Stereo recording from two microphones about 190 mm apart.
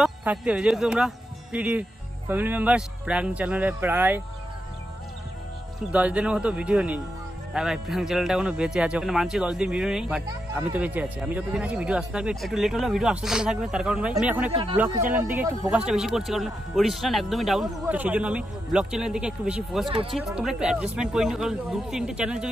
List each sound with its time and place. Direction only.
0.0 s speech: 5° right (ahead or behind)
5.8 s a man's voice: 5° right (ahead or behind)
14.5 s speech: 25° right (ahead or behind)
15.1 s speech: 10° right (ahead or behind)
15.7 s a man's voice: 5° right (ahead or behind)